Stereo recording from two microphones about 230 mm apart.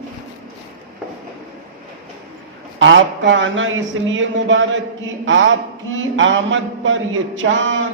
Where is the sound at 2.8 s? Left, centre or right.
Right.